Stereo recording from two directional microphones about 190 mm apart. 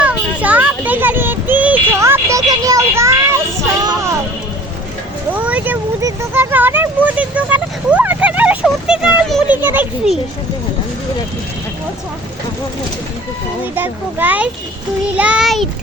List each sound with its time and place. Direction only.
0.0 s child singing: 5° right (ahead or behind)
3.8 s music: 15° right (ahead or behind)
5.3 s a sound: 5° right (ahead or behind)
13.7 s a child's voice: 10° right (ahead or behind)